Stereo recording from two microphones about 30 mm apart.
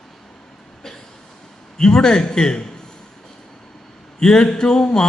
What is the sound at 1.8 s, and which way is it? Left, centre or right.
Speech, left.